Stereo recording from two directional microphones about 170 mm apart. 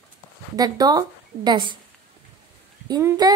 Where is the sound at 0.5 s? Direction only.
20° right (ahead or behind).